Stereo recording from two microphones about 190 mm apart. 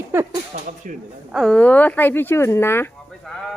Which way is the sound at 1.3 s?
5° left (ahead or behind).